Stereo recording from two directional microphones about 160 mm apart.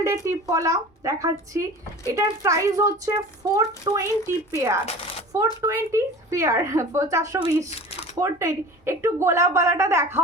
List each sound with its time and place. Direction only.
0.3 s speech: 20° right (ahead or behind)
7.7 s speech: 35° left (ahead or behind)
8.2 s a woman's voice: 20° right (ahead or behind)